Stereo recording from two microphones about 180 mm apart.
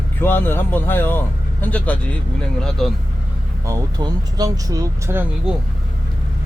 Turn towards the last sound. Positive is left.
turn(degrees=-10)  # may be behind; listen again after turning